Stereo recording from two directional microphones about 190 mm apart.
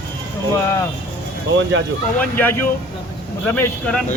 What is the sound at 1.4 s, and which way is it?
Speech, 75° right (ahead or behind).